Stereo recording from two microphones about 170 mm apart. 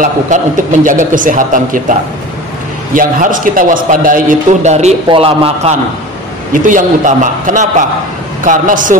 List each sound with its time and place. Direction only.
0.0 s a man's voice: 50° right (ahead or behind)
6.5 s a man's voice: 50° right (ahead or behind)